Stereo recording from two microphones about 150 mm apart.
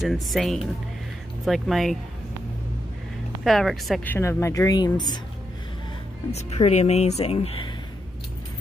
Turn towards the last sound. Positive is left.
turn(degrees=40)  # may be behind; listen again after turning